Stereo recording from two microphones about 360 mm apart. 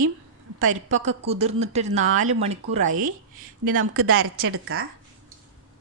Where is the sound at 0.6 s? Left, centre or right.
Right.